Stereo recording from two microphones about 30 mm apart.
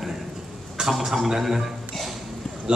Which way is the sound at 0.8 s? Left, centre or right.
Centre.